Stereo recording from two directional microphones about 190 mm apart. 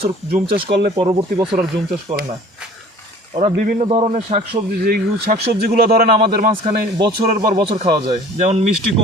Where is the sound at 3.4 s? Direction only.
35° right (ahead or behind).